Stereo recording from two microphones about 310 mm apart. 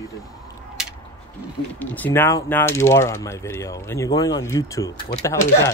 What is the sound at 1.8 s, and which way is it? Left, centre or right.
Speech, centre.